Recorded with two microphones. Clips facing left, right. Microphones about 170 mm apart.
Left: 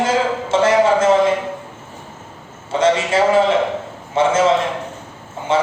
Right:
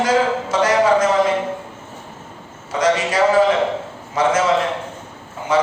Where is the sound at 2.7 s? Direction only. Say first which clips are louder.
Left 2 dB; 25° left (ahead or behind).